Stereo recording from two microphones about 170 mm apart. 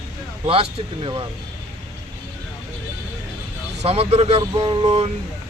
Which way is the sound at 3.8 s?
35° right (ahead or behind).